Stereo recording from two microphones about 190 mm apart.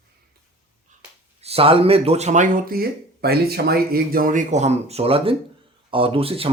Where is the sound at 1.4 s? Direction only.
30° right (ahead or behind).